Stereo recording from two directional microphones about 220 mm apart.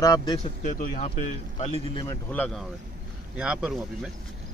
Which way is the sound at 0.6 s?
35° left (ahead or behind).